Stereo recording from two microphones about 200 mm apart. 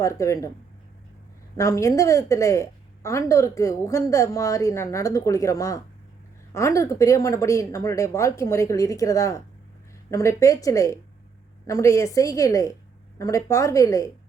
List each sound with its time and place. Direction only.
0.0 s a woman's voice: 15° left (ahead or behind)
1.5 s a woman's voice: 15° left (ahead or behind)